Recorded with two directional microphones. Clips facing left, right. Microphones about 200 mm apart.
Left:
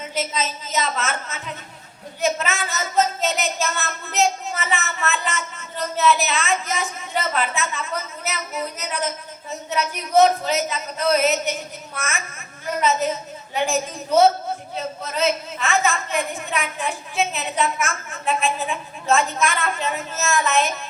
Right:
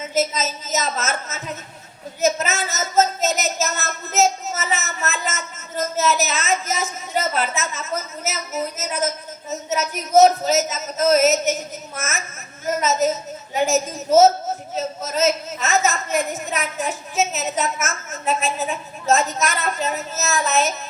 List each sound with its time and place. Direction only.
0.1 s a woman's voice: 45° right (ahead or behind)